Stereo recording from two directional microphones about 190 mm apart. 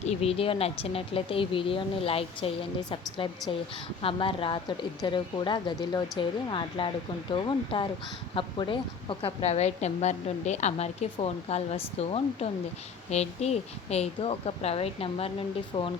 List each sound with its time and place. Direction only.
0.0 s a woman's voice: 35° left (ahead or behind)